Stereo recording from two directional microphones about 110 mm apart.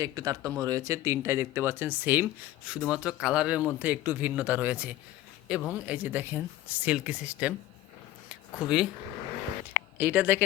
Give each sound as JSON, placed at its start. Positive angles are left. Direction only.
{"t": 0.0, "sound": "speech", "side_deg": -30}
{"t": 8.5, "sound": "speech", "side_deg": -5}
{"t": 10.0, "sound": "speech", "side_deg": -15}